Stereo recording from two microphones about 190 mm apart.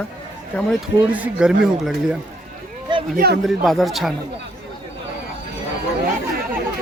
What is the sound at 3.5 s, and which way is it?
Speech, centre (ahead or behind).